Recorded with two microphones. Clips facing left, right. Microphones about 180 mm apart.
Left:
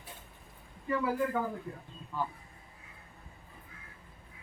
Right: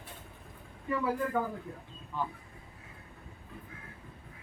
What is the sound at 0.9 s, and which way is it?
Speech, 5° left (ahead or behind).